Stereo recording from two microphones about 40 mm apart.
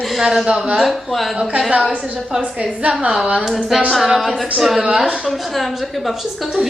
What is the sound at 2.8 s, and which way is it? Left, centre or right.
Speech, right.